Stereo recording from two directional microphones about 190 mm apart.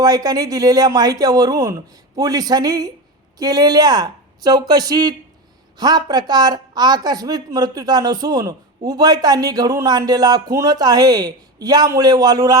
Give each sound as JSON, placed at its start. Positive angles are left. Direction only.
{"t": 0.0, "sound": "speech", "side_deg": -20}